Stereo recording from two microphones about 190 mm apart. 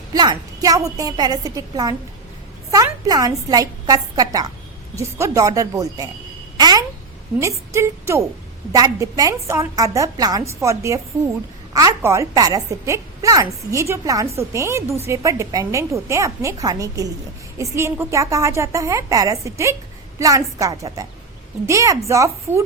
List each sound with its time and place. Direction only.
0.1 s a woman's voice: 20° right (ahead or behind)
6.6 s babbling: 20° right (ahead or behind)
7.7 s a woman's voice: 15° right (ahead or behind)